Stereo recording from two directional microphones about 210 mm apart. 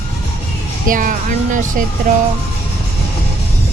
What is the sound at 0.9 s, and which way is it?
Speech, 40° right (ahead or behind).